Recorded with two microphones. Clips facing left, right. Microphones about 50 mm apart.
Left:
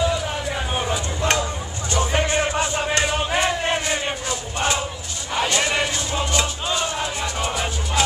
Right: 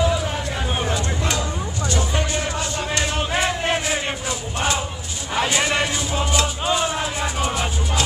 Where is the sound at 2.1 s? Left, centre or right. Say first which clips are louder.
Left 3 dB; left.